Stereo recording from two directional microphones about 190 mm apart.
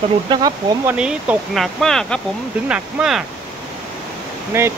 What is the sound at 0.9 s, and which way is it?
Speech, 5° right (ahead or behind).